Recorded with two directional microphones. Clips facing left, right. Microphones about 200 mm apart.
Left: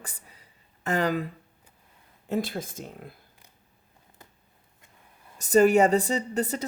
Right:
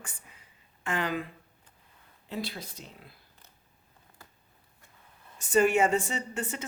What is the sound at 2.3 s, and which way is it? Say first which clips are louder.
Speech: left 8 dB; 50° left (ahead or behind).